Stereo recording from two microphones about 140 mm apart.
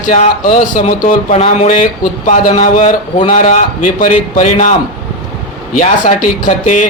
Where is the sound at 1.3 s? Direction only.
50° left (ahead or behind).